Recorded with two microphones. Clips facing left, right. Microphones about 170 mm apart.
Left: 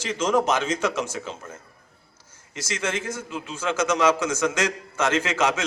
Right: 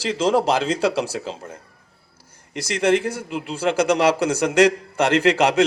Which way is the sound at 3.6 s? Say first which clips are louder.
Right 4 dB; 35° right (ahead or behind).